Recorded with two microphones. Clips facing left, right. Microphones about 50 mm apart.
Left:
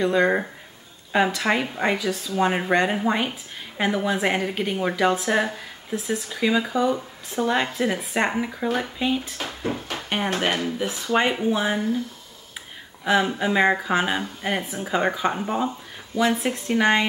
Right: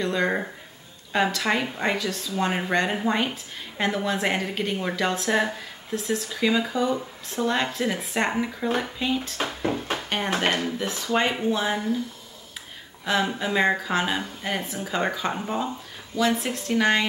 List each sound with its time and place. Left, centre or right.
0.0 s a woman's voice: centre
13.0 s a woman's voice: centre